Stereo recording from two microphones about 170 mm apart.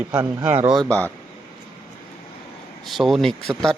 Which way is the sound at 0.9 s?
10° left (ahead or behind).